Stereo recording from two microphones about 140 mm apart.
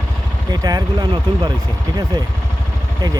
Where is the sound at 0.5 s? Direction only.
30° right (ahead or behind).